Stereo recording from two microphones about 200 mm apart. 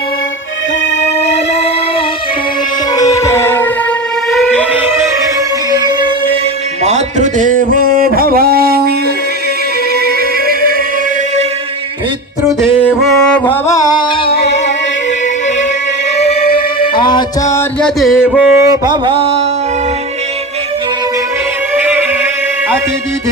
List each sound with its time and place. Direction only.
2.9 s music: 15° left (ahead or behind)
4.3 s siren: centre (ahead or behind)
5.7 s music: 20° right (ahead or behind)
6.8 s a sound: 35° right (ahead or behind)
9.9 s music: 50° right (ahead or behind)
13.0 s music: 5° left (ahead or behind)
13.5 s music: 15° left (ahead or behind)
16.6 s music: 25° left (ahead or behind)
17.5 s mantra: 5° left (ahead or behind); by 19.4 s 25° right (ahead or behind)
21.8 s music: 10° right (ahead or behind)